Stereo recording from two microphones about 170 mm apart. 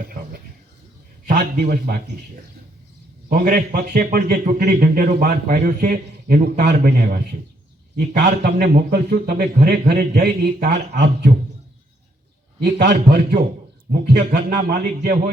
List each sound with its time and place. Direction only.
1.3 s a man's voice: 65° right (ahead or behind)
3.2 s a man's voice: 55° right (ahead or behind)
7.9 s a man's voice: 75° right (ahead or behind)
12.6 s a man's voice: 80° right
13.9 s a man's voice: 65° right (ahead or behind)